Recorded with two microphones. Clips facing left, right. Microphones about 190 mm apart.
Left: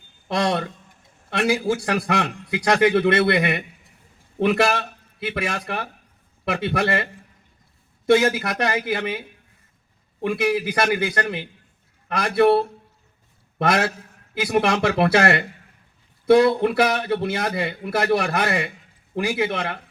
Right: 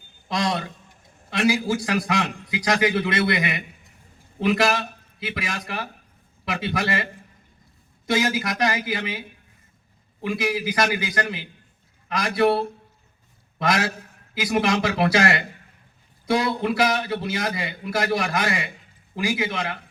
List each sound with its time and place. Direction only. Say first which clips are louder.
0.3 s a man's voice: left 3 dB; 60° left (ahead or behind)
8.0 s a man's voice: left 5 dB; 60° left (ahead or behind)
13.6 s a man's voice: left 3 dB; 60° left (ahead or behind)